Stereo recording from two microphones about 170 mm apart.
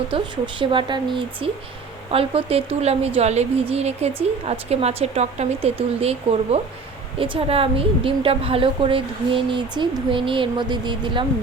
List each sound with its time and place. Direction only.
0.1 s a woman's voice: 30° right (ahead or behind)